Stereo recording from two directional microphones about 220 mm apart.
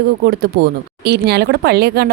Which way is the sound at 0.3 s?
45° right (ahead or behind).